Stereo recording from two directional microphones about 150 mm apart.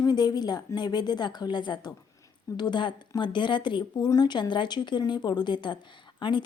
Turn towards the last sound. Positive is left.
turn(degrees=30)  # may be behind; listen again after turning